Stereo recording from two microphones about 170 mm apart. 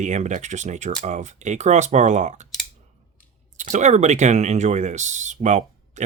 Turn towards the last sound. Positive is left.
turn(degrees=-45)  # may be behind; listen again after turning